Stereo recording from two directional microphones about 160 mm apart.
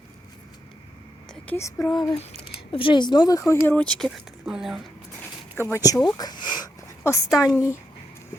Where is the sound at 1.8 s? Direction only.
5° left (ahead or behind).